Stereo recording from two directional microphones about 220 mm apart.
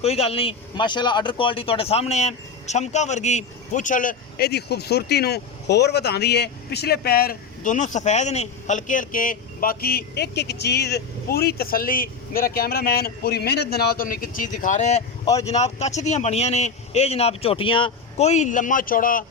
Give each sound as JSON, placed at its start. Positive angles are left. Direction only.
{"t": 0.0, "sound": "speech", "side_deg": 30}